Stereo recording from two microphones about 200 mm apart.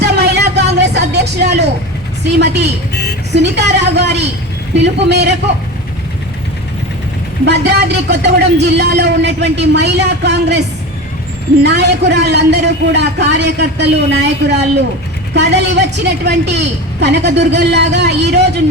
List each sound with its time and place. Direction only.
0.0 s a sound: 55° right (ahead or behind)
2.2 s a woman's voice: 55° right (ahead or behind)
7.4 s a woman's voice: 55° right (ahead or behind)
11.6 s a woman's voice: 55° right (ahead or behind)